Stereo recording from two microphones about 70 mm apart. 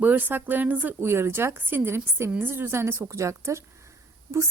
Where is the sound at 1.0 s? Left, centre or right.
Right.